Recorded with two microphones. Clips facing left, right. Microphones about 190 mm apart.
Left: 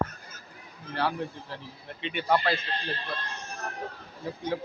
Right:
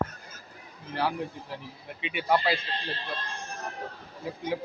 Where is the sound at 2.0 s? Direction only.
10° right (ahead or behind).